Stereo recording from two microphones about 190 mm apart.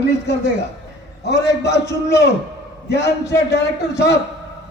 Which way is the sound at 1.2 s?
65° left (ahead or behind).